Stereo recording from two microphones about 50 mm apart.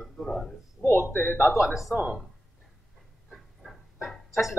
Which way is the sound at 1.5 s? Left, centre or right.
Centre.